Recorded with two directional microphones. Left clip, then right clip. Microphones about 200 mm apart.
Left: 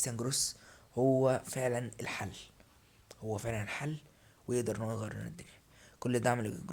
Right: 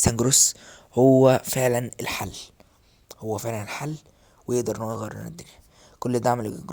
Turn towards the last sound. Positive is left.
turn(degrees=-25)  # may be behind; listen again after turning